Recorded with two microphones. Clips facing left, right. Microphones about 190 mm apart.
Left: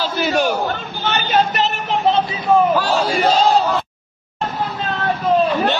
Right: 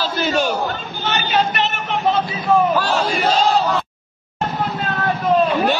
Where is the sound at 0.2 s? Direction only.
15° left (ahead or behind).